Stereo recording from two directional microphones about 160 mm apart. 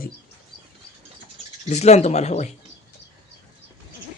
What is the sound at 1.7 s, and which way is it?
Speech, 45° left (ahead or behind).